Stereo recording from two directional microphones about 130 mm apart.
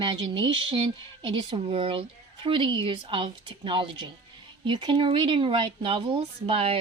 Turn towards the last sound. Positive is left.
turn(degrees=-45)  # may be behind; listen again after turning